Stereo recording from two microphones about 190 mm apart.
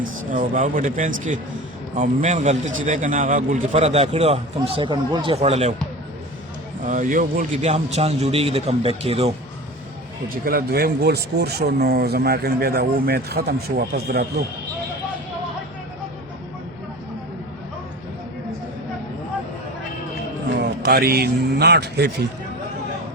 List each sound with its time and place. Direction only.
0.0 s a man's voice: 45° right (ahead or behind)
3.7 s a man's voice: 35° right (ahead or behind)
6.8 s a man's voice: 45° right (ahead or behind)
10.2 s speech: 50° right (ahead or behind)
20.6 s a man's voice: 65° right (ahead or behind)